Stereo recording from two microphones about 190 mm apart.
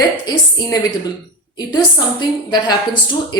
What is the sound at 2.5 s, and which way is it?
Speech, 20° left (ahead or behind).